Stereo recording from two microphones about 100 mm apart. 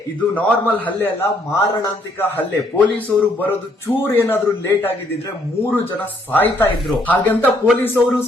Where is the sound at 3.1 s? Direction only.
10° left (ahead or behind).